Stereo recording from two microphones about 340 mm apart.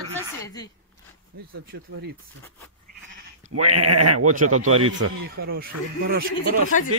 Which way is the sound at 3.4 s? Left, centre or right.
Right.